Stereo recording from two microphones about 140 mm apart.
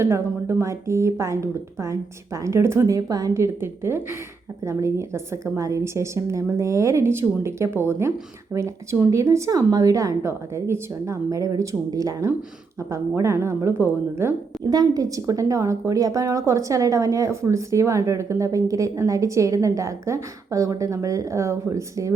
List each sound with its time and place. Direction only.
0.0 s a woman's voice: 20° right (ahead or behind)